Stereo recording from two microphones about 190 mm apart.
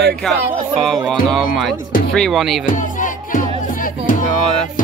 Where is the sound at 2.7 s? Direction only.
45° left (ahead or behind).